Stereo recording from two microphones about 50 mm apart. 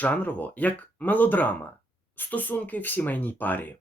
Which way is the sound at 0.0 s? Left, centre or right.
Left.